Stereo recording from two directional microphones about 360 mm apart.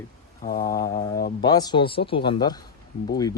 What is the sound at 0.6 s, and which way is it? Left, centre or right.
Speech, centre.